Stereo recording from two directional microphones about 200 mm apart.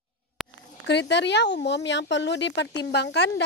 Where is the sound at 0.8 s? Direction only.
60° left (ahead or behind).